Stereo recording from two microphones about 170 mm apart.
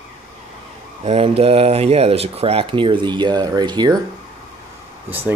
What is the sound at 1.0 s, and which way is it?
Speech, 35° right (ahead or behind).